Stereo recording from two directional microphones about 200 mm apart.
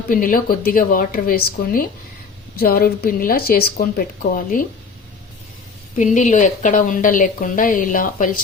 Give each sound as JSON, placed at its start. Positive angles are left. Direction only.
{"t": 0.1, "sound": "speech", "side_deg": 45}
{"t": 6.0, "sound": "speech", "side_deg": 40}